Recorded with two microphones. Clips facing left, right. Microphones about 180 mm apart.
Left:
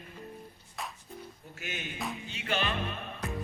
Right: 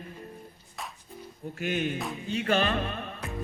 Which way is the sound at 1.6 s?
50° right (ahead or behind).